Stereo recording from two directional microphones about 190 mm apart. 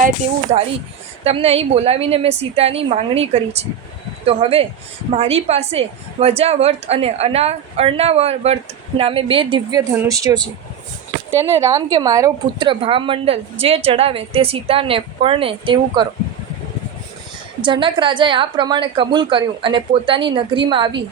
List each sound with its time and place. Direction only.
1.2 s a woman's voice: 35° right (ahead or behind)
17.6 s a woman's voice: 25° right (ahead or behind)